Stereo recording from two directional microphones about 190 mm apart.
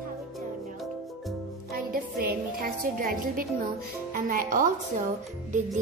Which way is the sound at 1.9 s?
50° right (ahead or behind).